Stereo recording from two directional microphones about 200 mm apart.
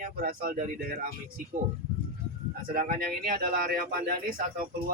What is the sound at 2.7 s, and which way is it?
Speech, 45° right (ahead or behind).